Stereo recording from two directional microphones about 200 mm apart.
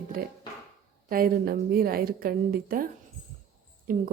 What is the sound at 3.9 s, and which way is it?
Speech, 45° right (ahead or behind).